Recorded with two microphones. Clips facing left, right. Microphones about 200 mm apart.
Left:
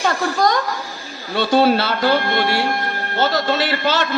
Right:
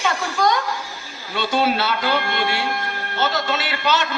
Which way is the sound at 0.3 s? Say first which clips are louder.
Even; 45° left (ahead or behind).